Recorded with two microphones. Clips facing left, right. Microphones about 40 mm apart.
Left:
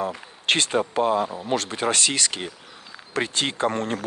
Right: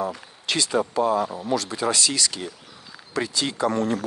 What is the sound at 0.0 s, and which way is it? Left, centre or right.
Speech, left.